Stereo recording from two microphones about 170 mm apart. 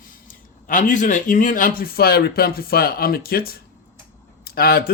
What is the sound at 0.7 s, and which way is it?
Speech, 50° left (ahead or behind).